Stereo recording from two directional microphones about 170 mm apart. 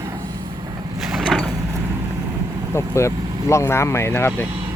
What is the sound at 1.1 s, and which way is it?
Mechanisms, centre (ahead or behind).